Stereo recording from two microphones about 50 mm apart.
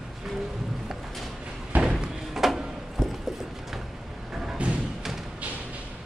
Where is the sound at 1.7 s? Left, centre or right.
Right.